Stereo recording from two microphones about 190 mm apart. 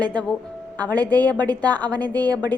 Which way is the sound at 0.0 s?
5° left (ahead or behind).